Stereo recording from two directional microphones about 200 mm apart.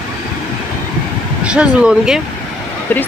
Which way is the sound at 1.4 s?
5° right (ahead or behind).